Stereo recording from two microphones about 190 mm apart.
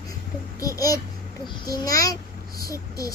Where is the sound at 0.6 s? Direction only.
20° left (ahead or behind).